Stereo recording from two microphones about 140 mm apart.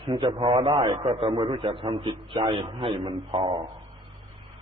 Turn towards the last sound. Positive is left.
turn(degrees=-45)  # may be behind; listen again after turning